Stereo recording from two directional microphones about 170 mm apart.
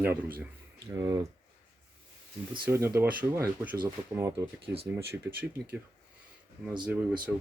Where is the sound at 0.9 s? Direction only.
20° right (ahead or behind).